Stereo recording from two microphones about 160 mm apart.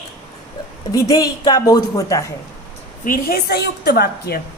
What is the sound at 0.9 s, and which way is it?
A woman's voice, 20° left (ahead or behind).